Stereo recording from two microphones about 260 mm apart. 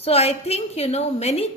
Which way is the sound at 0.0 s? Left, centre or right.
Left.